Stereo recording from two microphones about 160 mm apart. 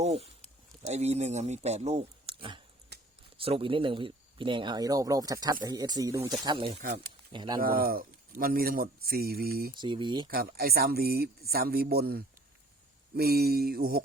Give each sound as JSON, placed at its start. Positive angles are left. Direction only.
{"t": 0.0, "sound": "speech", "side_deg": -40}
{"t": 2.9, "sound": "a sound", "side_deg": -90}
{"t": 3.3, "sound": "speech", "side_deg": -35}
{"t": 7.6, "sound": "speech", "side_deg": -65}
{"t": 9.7, "sound": "speech", "side_deg": -30}
{"t": 10.2, "sound": "speech", "side_deg": -70}